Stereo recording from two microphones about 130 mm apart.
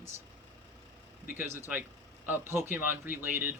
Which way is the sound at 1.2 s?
15° right (ahead or behind).